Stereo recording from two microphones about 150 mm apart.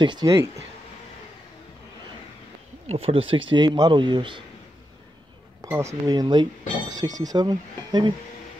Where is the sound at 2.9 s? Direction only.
40° right (ahead or behind).